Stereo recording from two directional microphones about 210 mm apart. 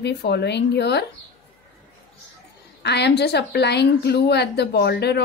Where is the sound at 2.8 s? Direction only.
55° left (ahead or behind).